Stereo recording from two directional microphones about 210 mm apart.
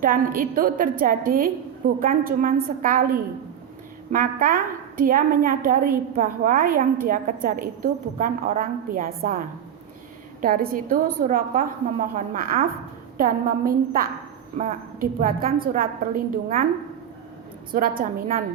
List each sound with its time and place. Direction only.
0.0 s a woman's voice: 40° right (ahead or behind)
10.4 s a woman's voice: 40° right (ahead or behind)
17.7 s a woman's voice: 45° right (ahead or behind)